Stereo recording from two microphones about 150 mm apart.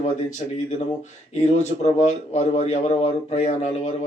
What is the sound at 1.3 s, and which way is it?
Speech, 50° left (ahead or behind).